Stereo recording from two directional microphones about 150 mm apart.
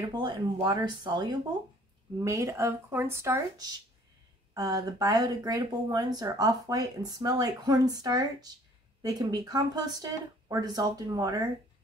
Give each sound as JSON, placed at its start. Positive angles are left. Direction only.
{"t": 0.1, "sound": "speech", "side_deg": -30}